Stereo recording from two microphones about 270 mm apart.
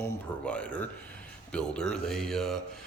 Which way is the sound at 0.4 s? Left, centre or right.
Centre.